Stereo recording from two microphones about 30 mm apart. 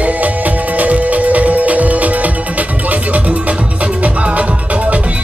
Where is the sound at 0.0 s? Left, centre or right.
Right.